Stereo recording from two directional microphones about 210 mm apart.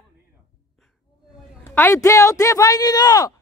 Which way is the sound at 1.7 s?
10° left (ahead or behind).